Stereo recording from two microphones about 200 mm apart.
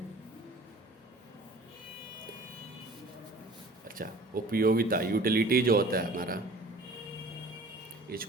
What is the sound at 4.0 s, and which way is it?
Speech, 45° right (ahead or behind).